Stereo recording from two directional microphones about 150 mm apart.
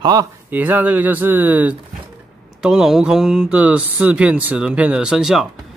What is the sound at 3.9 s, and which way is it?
Speech, 5° right (ahead or behind).